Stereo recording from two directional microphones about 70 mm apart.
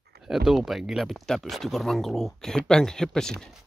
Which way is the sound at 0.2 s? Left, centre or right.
Centre.